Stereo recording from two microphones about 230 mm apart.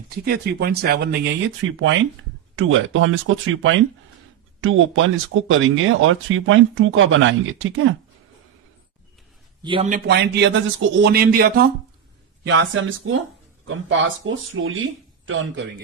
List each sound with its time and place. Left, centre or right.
0.3 s speech: right
9.6 s speech: right
9.9 s speech: right
12.5 s speech: right